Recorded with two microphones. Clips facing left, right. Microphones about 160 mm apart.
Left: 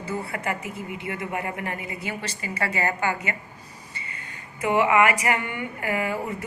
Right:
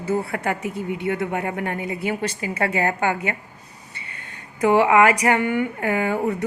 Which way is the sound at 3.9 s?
65° right (ahead or behind).